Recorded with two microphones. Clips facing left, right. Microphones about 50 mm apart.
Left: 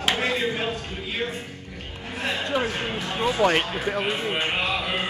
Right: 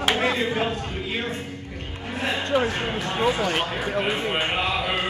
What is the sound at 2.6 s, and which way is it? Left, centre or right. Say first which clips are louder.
Music: right 2 dB; centre.